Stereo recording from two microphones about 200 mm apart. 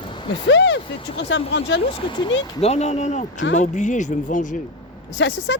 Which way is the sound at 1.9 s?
25° left (ahead or behind).